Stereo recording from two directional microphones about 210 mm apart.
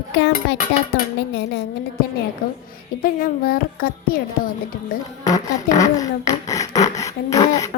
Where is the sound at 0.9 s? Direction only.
50° left (ahead or behind).